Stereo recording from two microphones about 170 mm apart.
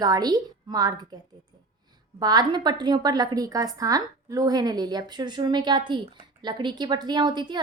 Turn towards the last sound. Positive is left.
turn(degrees=-25)  # may be behind; listen again after turning